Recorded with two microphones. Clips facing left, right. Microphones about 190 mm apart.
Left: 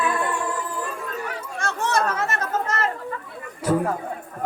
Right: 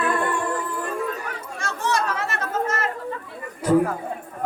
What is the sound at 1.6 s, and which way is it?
Chatter, 50° left (ahead or behind).